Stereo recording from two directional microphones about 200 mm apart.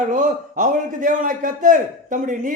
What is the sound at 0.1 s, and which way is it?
A man's voice, 40° right (ahead or behind).